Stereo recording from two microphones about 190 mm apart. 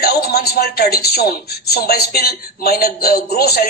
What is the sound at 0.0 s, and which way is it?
Speech, 55° left (ahead or behind).